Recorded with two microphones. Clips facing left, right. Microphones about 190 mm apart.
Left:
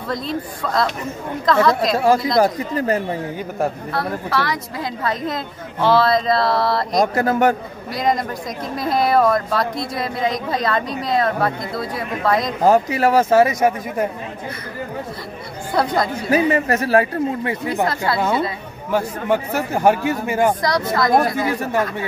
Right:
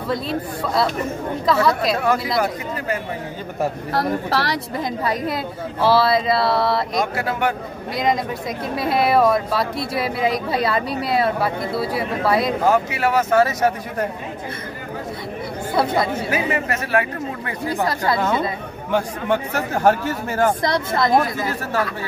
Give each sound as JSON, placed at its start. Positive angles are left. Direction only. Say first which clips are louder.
{"t": 0.1, "sound": "a woman's voice", "louder": "right 1 dB", "side_deg": -5}
{"t": 2.3, "sound": "speech", "louder": "left 5 dB", "side_deg": 40}
{"t": 4.0, "sound": "a woman's voice", "louder": "right 1 dB", "side_deg": -35}
{"t": 4.7, "sound": "a woman's voice", "louder": "right 2 dB", "side_deg": -10}
{"t": 7.0, "sound": "speech", "louder": "left 5 dB", "side_deg": 40}
{"t": 7.9, "sound": "a woman's voice", "louder": "left 1 dB", "side_deg": 0}
{"t": 12.6, "sound": "speech", "louder": "left 3 dB", "side_deg": 35}
{"t": 13.5, "sound": "speech", "louder": "left 2 dB", "side_deg": 10}
{"t": 15.7, "sound": "a woman's voice", "louder": "left 1 dB", "side_deg": -5}
{"t": 16.3, "sound": "speech", "louder": "left 5 dB", "side_deg": 35}
{"t": 17.8, "sound": "a woman's voice", "louder": "right 2 dB", "side_deg": -15}
{"t": 18.9, "sound": "speech", "louder": "left 1 dB", "side_deg": 5}
{"t": 20.6, "sound": "speech", "louder": "left 1 dB", "side_deg": -25}
{"t": 21.1, "sound": "speech", "louder": "left 3 dB", "side_deg": 50}